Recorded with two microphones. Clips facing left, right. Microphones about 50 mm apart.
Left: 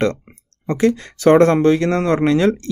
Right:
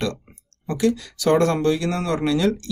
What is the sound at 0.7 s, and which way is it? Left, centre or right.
Speech, left.